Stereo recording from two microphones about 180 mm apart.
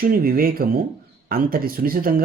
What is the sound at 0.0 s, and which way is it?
Speech, 55° right (ahead or behind).